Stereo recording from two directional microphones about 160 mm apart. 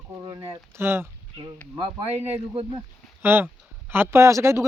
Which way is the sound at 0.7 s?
15° right (ahead or behind).